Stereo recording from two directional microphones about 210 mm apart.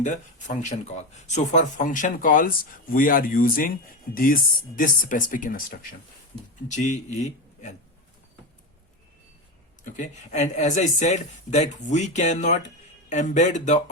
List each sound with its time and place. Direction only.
0.0 s speech: 35° left (ahead or behind)
6.7 s speech: 35° left (ahead or behind)
9.8 s speech: 35° left (ahead or behind)